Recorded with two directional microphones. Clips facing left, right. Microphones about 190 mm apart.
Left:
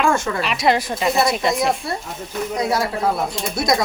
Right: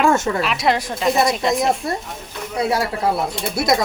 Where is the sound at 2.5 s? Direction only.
10° right (ahead or behind).